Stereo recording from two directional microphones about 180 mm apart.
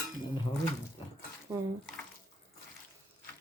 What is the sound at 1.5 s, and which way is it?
Speech, 15° right (ahead or behind).